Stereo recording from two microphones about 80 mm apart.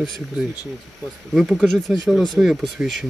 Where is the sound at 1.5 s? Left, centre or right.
Centre.